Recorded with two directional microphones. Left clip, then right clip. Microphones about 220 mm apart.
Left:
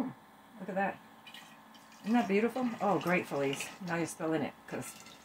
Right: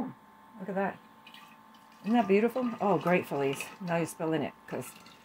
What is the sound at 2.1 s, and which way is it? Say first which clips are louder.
Speech: right 4 dB; 40° right (ahead or behind).